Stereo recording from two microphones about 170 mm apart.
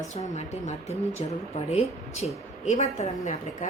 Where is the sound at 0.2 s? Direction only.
45° left (ahead or behind).